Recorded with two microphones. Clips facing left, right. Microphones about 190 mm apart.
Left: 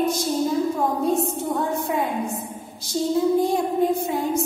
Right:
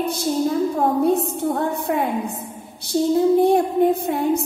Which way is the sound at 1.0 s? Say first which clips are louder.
Right 3 dB; 60° right (ahead or behind).